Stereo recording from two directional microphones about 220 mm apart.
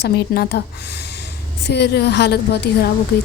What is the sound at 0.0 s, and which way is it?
A woman's voice, 50° left (ahead or behind).